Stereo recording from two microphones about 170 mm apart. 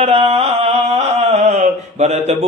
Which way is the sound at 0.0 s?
35° right (ahead or behind).